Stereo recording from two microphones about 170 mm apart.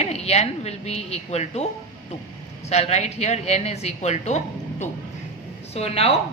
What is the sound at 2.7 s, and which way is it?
A woman's voice, 40° left (ahead or behind).